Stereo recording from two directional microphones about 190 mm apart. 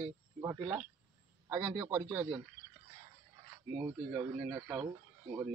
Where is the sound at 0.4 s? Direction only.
15° right (ahead or behind).